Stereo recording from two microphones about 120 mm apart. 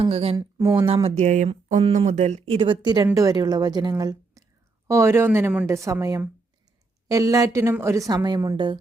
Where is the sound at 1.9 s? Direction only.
75° right (ahead or behind).